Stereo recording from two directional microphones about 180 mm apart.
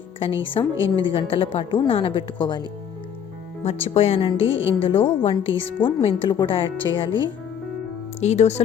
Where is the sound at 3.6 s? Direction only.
35° left (ahead or behind).